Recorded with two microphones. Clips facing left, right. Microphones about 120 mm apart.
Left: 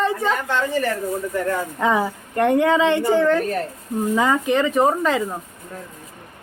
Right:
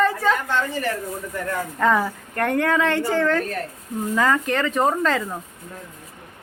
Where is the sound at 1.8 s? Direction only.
15° left (ahead or behind).